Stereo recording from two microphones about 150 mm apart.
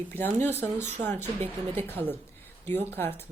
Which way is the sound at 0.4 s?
15° left (ahead or behind).